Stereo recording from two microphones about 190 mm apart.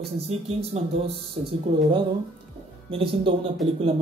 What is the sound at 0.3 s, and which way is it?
Speech, 35° right (ahead or behind).